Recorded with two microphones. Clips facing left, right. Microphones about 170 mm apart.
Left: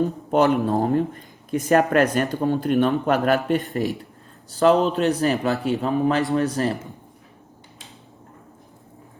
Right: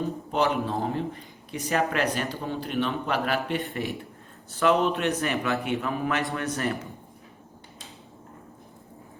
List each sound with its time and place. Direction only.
0.3 s a man's voice: 50° left (ahead or behind); by 6.7 s 30° left (ahead or behind)